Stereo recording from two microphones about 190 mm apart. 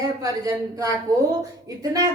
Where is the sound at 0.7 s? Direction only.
20° right (ahead or behind).